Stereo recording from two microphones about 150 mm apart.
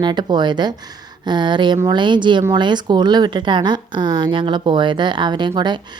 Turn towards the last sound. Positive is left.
turn(degrees=-30)  # may be behind; listen again after turning